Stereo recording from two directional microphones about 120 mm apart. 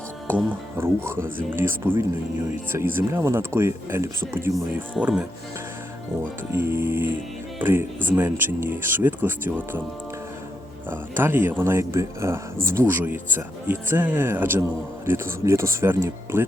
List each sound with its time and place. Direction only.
0.3 s speech: 20° right (ahead or behind)
4.9 s speech: 10° right (ahead or behind)
6.5 s speech: 20° right (ahead or behind)
10.8 s speech: 20° right (ahead or behind)